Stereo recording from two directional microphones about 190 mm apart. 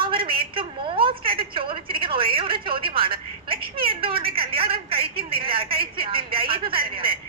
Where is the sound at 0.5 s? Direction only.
30° right (ahead or behind).